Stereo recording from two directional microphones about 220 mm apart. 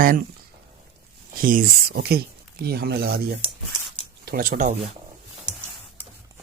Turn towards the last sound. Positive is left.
turn(degrees=-35)  # may be behind; listen again after turning